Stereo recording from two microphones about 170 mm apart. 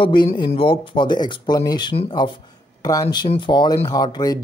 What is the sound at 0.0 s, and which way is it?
Speech, 30° left (ahead or behind).